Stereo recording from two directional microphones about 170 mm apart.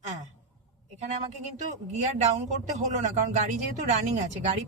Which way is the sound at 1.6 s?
45° right (ahead or behind).